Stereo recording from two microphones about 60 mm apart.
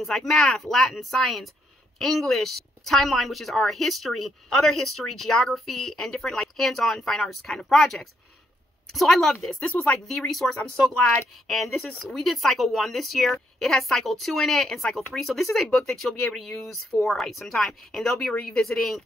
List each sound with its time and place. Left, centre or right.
0.3 s a woman's voice: centre
9.6 s speech: left
10.0 s a woman's voice: centre